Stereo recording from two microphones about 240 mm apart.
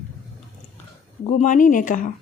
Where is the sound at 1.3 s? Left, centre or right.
Left.